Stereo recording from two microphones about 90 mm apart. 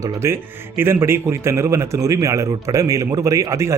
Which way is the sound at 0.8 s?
30° right (ahead or behind).